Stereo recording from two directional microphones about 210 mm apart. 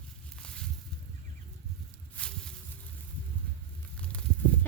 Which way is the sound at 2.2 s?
5° left (ahead or behind).